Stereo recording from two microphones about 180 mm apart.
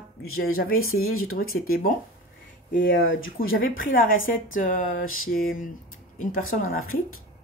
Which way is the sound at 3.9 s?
50° left (ahead or behind).